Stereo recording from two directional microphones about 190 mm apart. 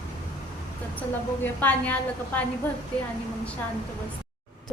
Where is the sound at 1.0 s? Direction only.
10° left (ahead or behind).